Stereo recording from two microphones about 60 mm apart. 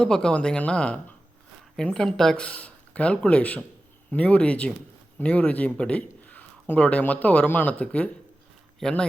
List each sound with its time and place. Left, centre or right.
0.0 s speech: centre
2.4 s speech: left
8.8 s speech: centre